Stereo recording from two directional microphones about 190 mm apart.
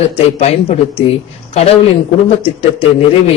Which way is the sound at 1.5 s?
30° left (ahead or behind).